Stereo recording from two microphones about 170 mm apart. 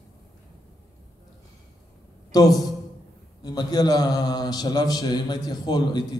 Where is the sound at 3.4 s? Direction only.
25° left (ahead or behind).